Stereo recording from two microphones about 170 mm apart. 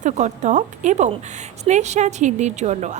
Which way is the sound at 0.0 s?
45° right (ahead or behind).